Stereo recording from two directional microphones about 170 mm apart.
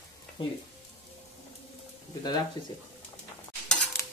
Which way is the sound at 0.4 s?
30° left (ahead or behind).